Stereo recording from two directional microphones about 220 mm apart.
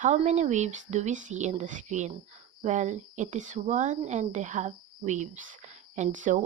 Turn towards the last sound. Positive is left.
turn(degrees=-35)  # may be behind; listen again after turning